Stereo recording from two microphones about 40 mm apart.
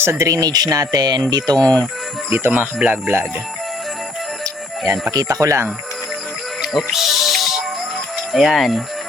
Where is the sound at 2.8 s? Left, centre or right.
Centre.